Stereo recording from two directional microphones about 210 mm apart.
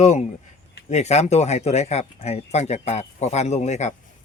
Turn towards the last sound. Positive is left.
turn(degrees=35)  # may be behind; listen again after turning